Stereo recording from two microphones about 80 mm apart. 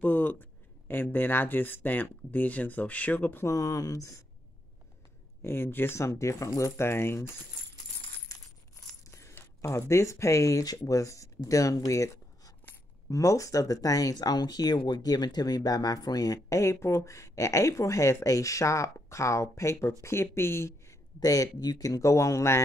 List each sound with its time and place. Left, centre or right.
0.0 s speech: left
3.4 s speech: left
5.4 s speech: left
9.6 s speech: left
14.1 s speech: left
21.2 s speech: left